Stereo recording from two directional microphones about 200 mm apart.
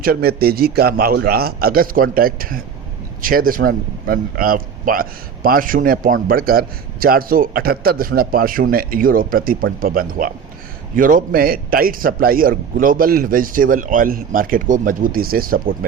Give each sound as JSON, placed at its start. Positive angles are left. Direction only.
{"t": 0.0, "sound": "a man's voice", "side_deg": -50}